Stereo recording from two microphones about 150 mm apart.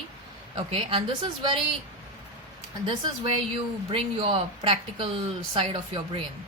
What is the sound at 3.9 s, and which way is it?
Speech, 35° right (ahead or behind).